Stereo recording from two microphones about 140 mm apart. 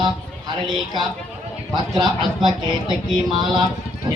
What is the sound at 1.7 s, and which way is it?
Speech, 30° right (ahead or behind).